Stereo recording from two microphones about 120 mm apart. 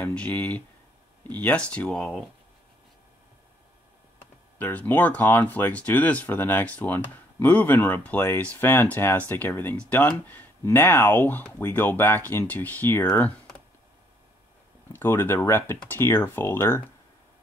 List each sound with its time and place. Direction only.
0.0 s speech: 15° left (ahead or behind)
4.6 s speech: 15° left (ahead or behind)
14.9 s speech: 15° left (ahead or behind)